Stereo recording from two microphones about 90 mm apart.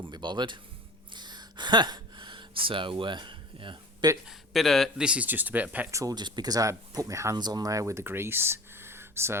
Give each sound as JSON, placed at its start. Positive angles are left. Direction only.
{"t": 0.0, "sound": "music", "side_deg": -60}
{"t": 1.1, "sound": "a sound", "side_deg": -55}
{"t": 4.3, "sound": "speech", "side_deg": 0}
{"t": 4.9, "sound": "speech", "side_deg": -10}
{"t": 5.9, "sound": "speech", "side_deg": -35}
{"t": 6.1, "sound": "speech", "side_deg": -50}
{"t": 7.3, "sound": "speech", "side_deg": -50}